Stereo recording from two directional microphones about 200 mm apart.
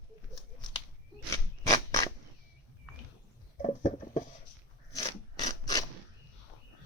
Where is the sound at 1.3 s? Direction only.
15° left (ahead or behind).